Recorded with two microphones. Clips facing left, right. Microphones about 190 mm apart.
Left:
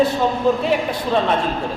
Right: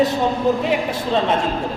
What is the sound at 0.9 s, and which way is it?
Speech, 20° right (ahead or behind).